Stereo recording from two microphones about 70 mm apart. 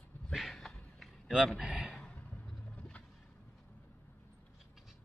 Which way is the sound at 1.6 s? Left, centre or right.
Centre.